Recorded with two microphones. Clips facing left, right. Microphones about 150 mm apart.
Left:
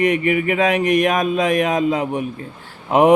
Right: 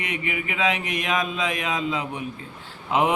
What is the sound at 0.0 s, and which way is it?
A man's voice, 50° left (ahead or behind).